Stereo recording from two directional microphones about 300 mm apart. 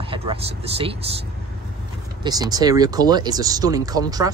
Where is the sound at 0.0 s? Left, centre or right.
Centre.